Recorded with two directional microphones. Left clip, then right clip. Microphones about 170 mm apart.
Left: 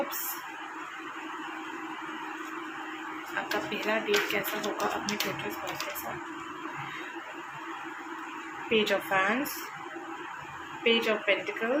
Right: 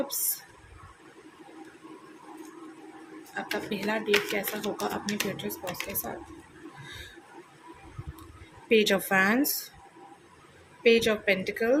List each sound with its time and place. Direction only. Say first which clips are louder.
3.5 s speech: even; 30° right (ahead or behind)
8.7 s speech: right 3 dB; 50° right (ahead or behind)
10.8 s speech: right 3 dB; 45° right (ahead or behind)